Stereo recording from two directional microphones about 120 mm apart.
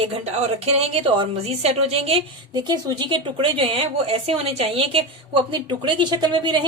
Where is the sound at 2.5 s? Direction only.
35° right (ahead or behind).